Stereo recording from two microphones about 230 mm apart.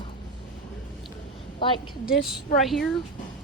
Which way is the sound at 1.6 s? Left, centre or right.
Left.